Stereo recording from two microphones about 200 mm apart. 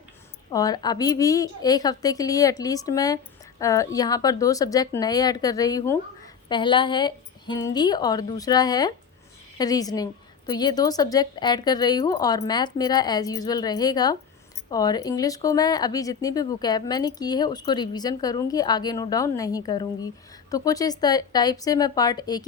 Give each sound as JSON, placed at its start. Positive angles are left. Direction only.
{"t": 0.5, "sound": "a woman's voice", "side_deg": 20}